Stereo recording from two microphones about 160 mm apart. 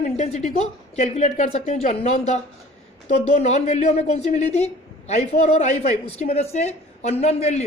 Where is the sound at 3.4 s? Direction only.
45° left (ahead or behind).